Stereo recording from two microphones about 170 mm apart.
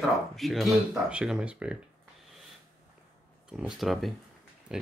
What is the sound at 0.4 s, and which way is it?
Speech, centre (ahead or behind).